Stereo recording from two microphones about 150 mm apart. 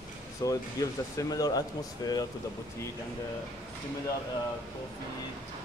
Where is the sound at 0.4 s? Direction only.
20° left (ahead or behind).